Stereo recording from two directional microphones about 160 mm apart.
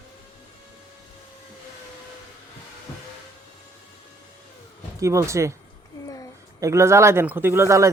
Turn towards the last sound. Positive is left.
turn(degrees=-20)  # may be behind; listen again after turning